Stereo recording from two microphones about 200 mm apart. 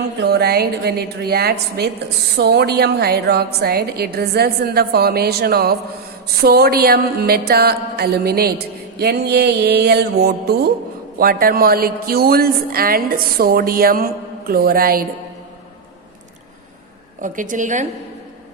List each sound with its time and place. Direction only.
0.2 s music: 55° right (ahead or behind)
17.2 s a woman's voice: 40° right (ahead or behind)